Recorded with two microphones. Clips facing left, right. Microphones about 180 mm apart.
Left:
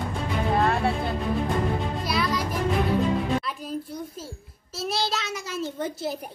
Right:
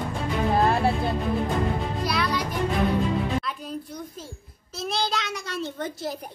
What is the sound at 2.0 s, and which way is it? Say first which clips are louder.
Music: even; centre (ahead or behind).